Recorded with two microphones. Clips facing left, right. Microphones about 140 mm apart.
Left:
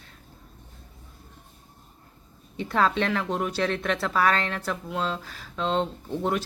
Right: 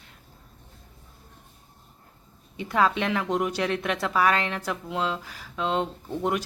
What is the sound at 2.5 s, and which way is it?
Speech, 15° right (ahead or behind).